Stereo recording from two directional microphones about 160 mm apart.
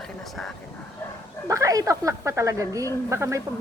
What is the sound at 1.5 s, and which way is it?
Speech, 20° right (ahead or behind).